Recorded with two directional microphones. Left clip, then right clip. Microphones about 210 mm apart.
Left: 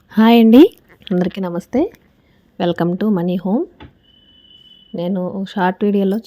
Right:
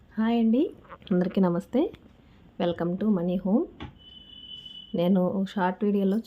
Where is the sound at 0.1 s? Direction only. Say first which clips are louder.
Left 15 dB; 50° left (ahead or behind).